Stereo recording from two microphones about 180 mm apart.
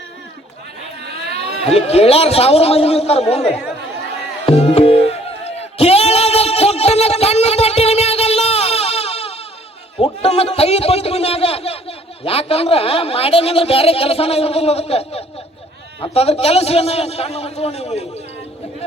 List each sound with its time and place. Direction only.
1.6 s a man's voice: 35° left (ahead or behind)
3.4 s speech: 5° left (ahead or behind)
4.4 s music: 35° left (ahead or behind)
10.0 s a man's voice: 35° left (ahead or behind)